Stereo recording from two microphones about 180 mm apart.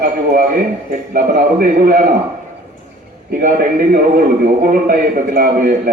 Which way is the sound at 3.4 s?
55° right (ahead or behind).